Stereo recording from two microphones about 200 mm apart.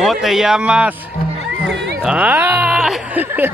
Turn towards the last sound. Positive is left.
turn(degrees=-10)  # may be behind; listen again after turning